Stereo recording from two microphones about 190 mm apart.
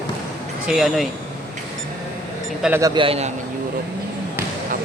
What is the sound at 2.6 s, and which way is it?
Speech, 5° right (ahead or behind).